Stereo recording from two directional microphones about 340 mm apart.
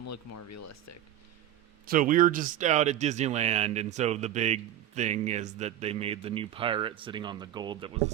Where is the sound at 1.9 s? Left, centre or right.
Right.